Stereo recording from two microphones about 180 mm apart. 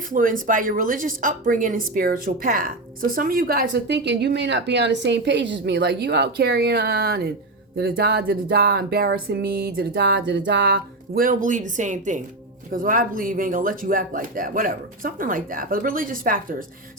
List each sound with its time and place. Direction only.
0.1 s a woman's voice: 50° right (ahead or behind); by 10.8 s 85° right
11.1 s speech: 50° right (ahead or behind)